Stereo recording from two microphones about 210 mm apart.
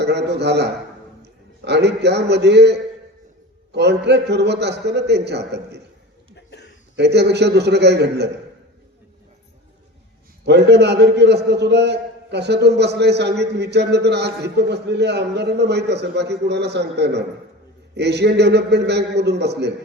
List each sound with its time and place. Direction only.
0.0 s a man's voice: 55° right (ahead or behind)
6.3 s a sound: 55° left (ahead or behind)
6.9 s a man's voice: 55° right (ahead or behind)
10.4 s a man's voice: 55° right (ahead or behind)